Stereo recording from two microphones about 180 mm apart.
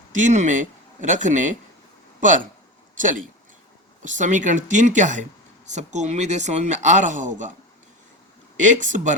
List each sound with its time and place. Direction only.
0.1 s speech: 45° right (ahead or behind)
4.0 s speech: 45° right (ahead or behind)
8.5 s speech: 45° right (ahead or behind)